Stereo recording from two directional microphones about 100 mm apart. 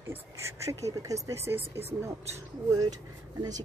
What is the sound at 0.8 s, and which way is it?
A woman's voice, 30° right (ahead or behind).